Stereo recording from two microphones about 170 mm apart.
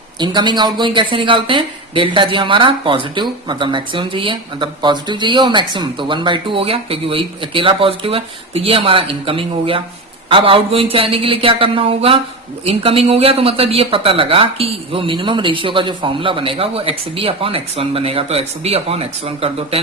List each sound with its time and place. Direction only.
0.2 s a woman's voice: 25° right (ahead or behind)